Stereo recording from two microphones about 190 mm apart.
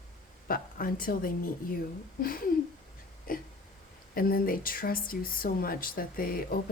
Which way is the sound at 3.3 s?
45° left (ahead or behind).